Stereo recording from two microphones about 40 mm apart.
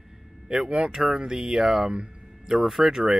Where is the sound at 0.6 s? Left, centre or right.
Right.